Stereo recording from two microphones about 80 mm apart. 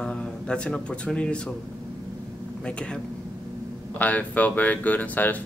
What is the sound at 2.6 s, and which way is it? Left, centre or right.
Speech, centre.